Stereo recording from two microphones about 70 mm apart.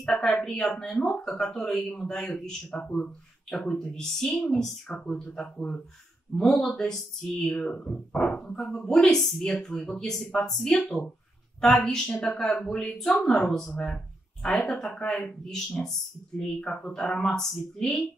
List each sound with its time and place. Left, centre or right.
0.0 s speech: centre
2.8 s speech: centre